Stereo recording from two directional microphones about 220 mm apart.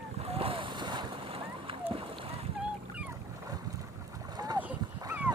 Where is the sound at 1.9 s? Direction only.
25° right (ahead or behind).